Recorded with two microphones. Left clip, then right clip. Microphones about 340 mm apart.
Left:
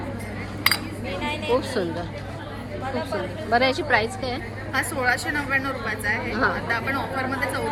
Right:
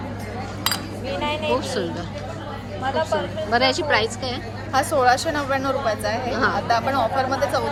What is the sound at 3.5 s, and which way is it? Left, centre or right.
A woman's voice, centre.